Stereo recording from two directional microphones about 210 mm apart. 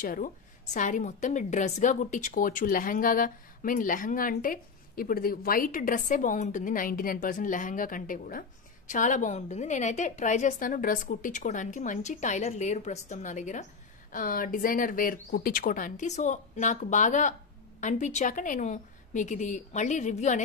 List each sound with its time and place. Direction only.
0.0 s a woman's voice: 40° left (ahead or behind)